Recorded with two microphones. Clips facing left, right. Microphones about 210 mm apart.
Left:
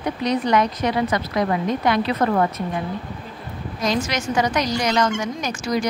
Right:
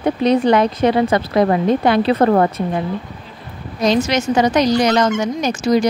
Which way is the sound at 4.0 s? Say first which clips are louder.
Right 5 dB; 25° right (ahead or behind).